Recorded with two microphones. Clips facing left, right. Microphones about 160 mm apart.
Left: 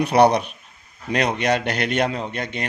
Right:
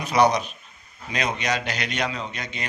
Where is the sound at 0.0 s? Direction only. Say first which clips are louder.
Left 4 dB; 60° left (ahead or behind).